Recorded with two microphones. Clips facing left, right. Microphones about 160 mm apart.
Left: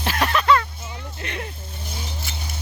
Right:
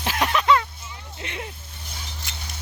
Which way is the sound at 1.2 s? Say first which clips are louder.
Left 1 dB; 15° right (ahead or behind).